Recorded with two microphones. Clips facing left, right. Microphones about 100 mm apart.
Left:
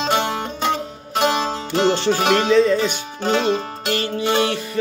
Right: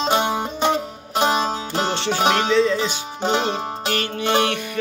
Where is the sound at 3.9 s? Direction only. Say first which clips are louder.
Left 4 dB; 30° left (ahead or behind).